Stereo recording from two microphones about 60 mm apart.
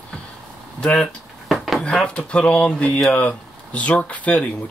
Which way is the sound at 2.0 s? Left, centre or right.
Centre.